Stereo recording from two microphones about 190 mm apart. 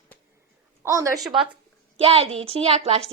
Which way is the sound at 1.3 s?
25° right (ahead or behind).